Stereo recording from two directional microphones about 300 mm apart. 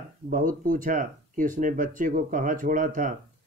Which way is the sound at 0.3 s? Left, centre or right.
Right.